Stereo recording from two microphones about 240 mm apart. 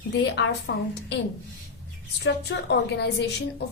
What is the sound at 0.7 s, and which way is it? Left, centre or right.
Speech, left.